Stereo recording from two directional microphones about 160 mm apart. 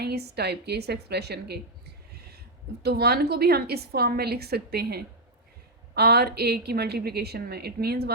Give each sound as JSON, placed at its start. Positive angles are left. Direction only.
{"t": 0.0, "sound": "a woman's voice", "side_deg": -90}
{"t": 2.8, "sound": "a woman's voice", "side_deg": -85}